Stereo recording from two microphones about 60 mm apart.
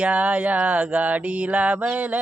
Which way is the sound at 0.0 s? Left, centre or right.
Centre.